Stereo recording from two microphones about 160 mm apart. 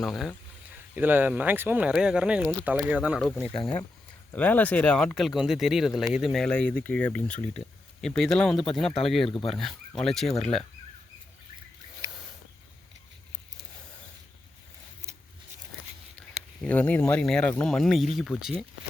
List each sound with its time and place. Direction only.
0.0 s speech: centre (ahead or behind)
0.9 s speech: 10° right (ahead or behind)
4.3 s speech: 10° left (ahead or behind)
16.6 s speech: 10° left (ahead or behind)